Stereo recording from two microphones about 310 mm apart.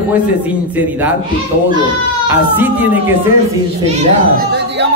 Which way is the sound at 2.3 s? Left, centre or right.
Centre.